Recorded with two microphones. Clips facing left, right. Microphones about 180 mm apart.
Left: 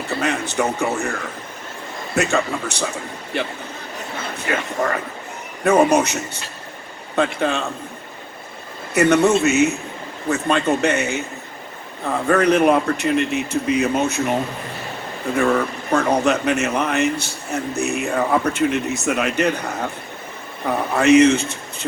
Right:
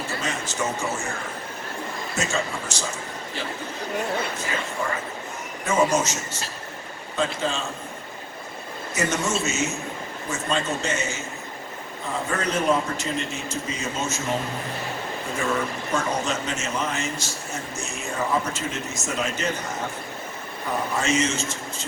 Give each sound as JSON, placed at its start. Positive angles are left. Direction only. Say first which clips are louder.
{"t": 0.1, "sound": "speech", "louder": "left 7 dB", "side_deg": 60}
{"t": 2.1, "sound": "speech", "louder": "left 8 dB", "side_deg": 60}
{"t": 9.0, "sound": "speech", "louder": "left 11 dB", "side_deg": 60}
{"t": 15.4, "sound": "speech", "louder": "left 8 dB", "side_deg": 60}